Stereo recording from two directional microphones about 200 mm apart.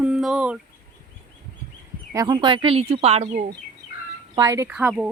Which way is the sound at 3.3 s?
45° right (ahead or behind).